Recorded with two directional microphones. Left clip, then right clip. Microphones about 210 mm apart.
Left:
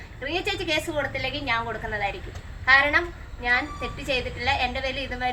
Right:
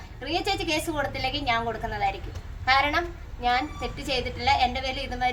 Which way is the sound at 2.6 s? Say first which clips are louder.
Left 4 dB; 20° right (ahead or behind).